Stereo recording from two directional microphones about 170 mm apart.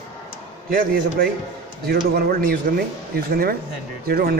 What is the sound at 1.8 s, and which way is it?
A man's voice, 65° right (ahead or behind).